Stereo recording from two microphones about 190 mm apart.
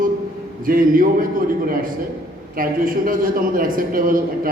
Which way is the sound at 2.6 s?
45° right (ahead or behind).